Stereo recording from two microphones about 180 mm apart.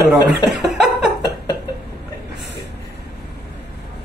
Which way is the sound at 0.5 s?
Centre (ahead or behind).